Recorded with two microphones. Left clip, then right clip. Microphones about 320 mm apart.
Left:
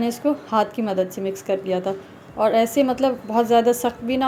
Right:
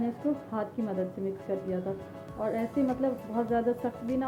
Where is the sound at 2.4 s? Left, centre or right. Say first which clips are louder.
Left 13 dB; centre.